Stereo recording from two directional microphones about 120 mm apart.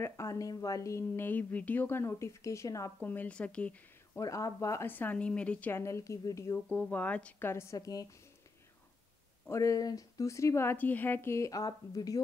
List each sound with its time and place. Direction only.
0.0 s a woman's voice: 25° left (ahead or behind)
3.0 s speech: 15° left (ahead or behind)
4.2 s a woman's voice: 25° left (ahead or behind)
6.7 s speech: 15° left (ahead or behind); by 8.1 s 30° left (ahead or behind)
9.5 s a woman's voice: 25° left (ahead or behind)